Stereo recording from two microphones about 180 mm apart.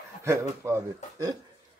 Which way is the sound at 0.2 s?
15° right (ahead or behind).